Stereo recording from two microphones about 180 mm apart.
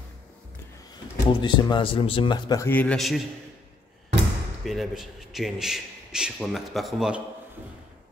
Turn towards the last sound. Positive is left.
turn(degrees=-5)  # may be behind; listen again after turning